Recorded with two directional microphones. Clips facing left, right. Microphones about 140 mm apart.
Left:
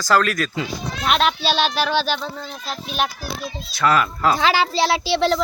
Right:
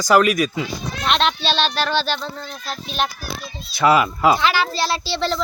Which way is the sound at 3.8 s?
10° right (ahead or behind).